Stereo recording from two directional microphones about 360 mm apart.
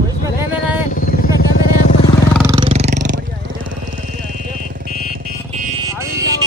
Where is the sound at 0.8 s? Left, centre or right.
Left.